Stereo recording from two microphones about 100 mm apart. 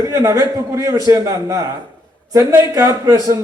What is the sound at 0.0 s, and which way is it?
Speech, 35° right (ahead or behind).